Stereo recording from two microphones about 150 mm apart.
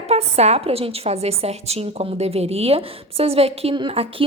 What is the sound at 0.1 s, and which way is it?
A woman's voice, 45° right (ahead or behind).